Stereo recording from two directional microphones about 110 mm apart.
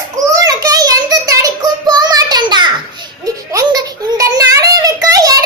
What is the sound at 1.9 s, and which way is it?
Child singing, 35° right (ahead or behind).